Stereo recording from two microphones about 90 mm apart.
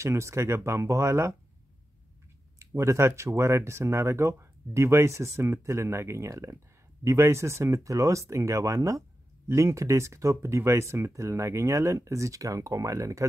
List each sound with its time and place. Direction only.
0.0 s speech: 30° right (ahead or behind)
2.6 s speech: 30° right (ahead or behind)